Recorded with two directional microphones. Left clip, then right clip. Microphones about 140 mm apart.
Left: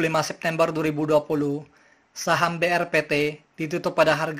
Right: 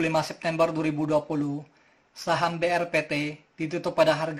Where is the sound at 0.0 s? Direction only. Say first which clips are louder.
Left 2 dB; 40° left (ahead or behind).